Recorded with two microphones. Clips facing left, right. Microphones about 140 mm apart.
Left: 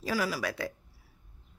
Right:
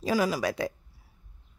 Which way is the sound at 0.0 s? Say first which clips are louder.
Right 5 dB; 20° right (ahead or behind).